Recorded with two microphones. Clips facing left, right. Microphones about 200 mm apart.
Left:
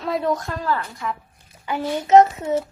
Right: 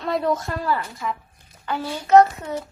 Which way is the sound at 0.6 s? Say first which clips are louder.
Even; 10° right (ahead or behind).